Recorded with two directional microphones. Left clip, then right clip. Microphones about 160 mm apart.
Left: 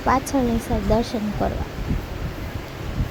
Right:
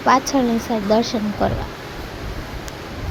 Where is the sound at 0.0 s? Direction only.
10° right (ahead or behind).